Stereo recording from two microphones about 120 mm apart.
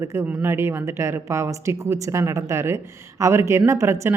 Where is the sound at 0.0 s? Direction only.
25° right (ahead or behind).